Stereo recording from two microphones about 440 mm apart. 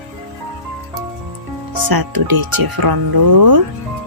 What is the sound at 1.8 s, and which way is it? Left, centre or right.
Speech, right.